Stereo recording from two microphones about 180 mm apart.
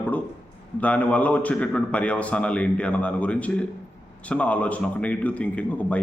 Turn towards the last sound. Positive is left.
turn(degrees=10)  # may be behind; listen again after turning